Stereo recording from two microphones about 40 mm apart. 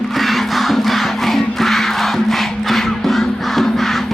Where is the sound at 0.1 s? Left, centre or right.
Centre.